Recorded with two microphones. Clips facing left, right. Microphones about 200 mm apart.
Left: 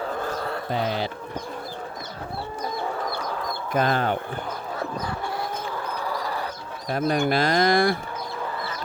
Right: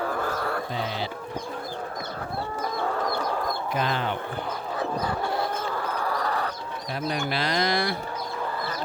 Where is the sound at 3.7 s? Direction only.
45° left (ahead or behind).